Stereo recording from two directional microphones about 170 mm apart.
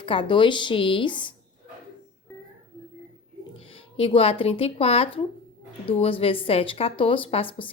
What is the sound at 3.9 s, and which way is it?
A woman's voice, 35° left (ahead or behind).